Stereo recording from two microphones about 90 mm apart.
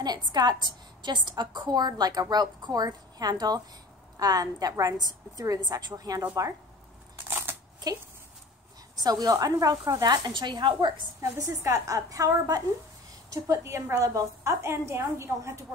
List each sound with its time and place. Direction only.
0.0 s a woman's voice: 50° right (ahead or behind)
7.5 s a sound: 25° right (ahead or behind)
9.0 s a woman's voice: 45° right (ahead or behind)
11.1 s a woman's voice: 35° right (ahead or behind)